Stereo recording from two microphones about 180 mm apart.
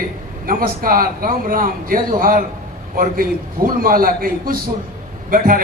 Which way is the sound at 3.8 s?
50° right (ahead or behind).